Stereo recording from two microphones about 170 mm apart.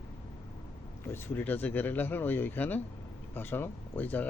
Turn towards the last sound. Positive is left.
turn(degrees=10)  # may be behind; listen again after turning